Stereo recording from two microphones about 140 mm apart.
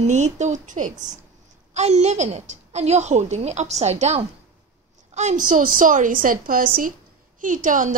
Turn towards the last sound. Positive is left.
turn(degrees=-65)  # may be behind; listen again after turning